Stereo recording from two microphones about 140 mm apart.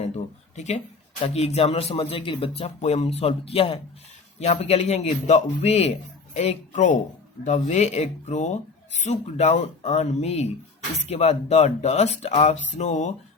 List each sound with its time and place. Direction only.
0.5 s speech: 60° left (ahead or behind)
1.2 s a man's voice: 45° left (ahead or behind)